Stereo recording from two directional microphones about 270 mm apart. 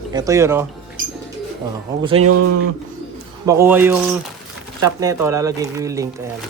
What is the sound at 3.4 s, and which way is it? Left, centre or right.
Speech, centre.